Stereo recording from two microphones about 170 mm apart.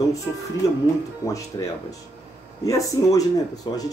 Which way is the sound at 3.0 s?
20° left (ahead or behind).